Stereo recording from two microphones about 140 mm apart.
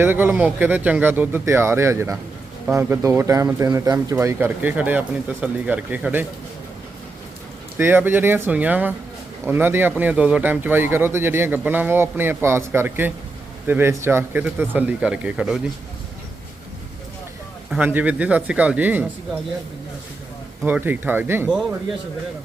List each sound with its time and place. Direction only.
0.0 s a man's voice: 15° right (ahead or behind)
7.8 s a man's voice: 15° right (ahead or behind)
17.7 s a man's voice: 10° right (ahead or behind)
20.7 s a man's voice: 15° right (ahead or behind)